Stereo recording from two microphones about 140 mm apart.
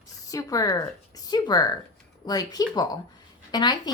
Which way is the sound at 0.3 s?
25° left (ahead or behind).